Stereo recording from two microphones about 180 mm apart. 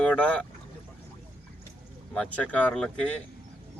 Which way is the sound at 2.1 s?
5° left (ahead or behind).